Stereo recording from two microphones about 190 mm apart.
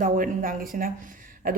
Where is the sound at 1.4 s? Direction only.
50° right (ahead or behind).